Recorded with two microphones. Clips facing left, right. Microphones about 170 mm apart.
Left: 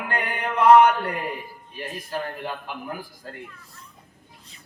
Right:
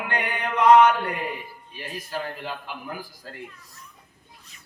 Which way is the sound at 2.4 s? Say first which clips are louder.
Left 2 dB; 50° left (ahead or behind).